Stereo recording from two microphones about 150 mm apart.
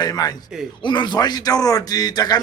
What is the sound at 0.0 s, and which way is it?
A man's voice, 25° left (ahead or behind).